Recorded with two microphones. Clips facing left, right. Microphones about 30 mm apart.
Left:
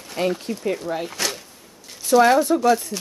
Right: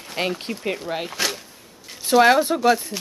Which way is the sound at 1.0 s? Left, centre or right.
Centre.